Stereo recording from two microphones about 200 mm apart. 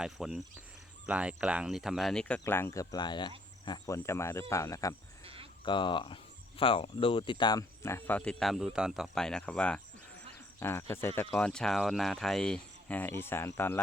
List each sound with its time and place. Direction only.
0.0 s speech: centre (ahead or behind); by 4.9 s 15° left (ahead or behind)
5.2 s a sound: 30° right (ahead or behind)
5.6 s speech: 25° left (ahead or behind)